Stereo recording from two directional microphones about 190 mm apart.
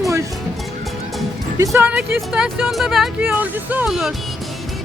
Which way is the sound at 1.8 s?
5° right (ahead or behind).